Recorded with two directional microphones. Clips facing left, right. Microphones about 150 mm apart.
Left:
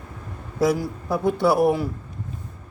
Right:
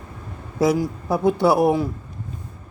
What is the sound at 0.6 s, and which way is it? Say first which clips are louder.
Speech: right 2 dB; 20° right (ahead or behind).